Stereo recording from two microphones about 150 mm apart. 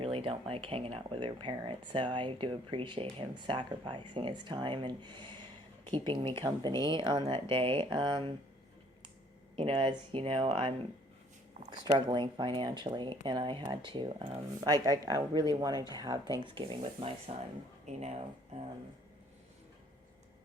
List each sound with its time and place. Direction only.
0.0 s speech: 40° right (ahead or behind)
9.6 s speech: 35° right (ahead or behind)
11.8 s speech: 30° right (ahead or behind)
17.9 s speech: 45° right (ahead or behind)